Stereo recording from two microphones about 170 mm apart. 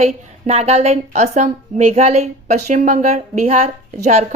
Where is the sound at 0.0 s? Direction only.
40° right (ahead or behind).